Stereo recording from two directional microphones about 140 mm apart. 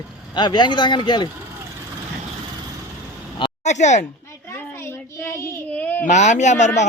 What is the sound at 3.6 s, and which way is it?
Speech, 55° left (ahead or behind).